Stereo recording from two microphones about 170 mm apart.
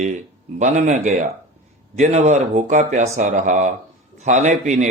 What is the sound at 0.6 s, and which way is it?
A man's voice, 45° right (ahead or behind).